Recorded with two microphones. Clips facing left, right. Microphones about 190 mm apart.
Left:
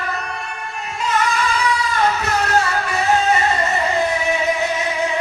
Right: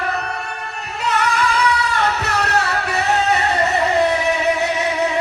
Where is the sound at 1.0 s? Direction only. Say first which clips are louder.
Right 1 dB; 65° right (ahead or behind).